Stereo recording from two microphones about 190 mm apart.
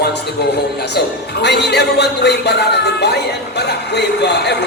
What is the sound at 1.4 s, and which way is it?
Speech, 60° left (ahead or behind).